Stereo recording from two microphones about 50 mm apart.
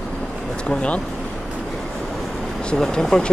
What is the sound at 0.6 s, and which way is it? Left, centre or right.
Speech, left.